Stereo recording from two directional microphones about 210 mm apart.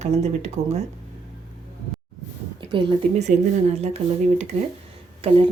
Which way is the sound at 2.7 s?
25° right (ahead or behind).